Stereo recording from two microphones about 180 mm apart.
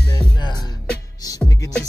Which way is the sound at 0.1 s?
25° left (ahead or behind).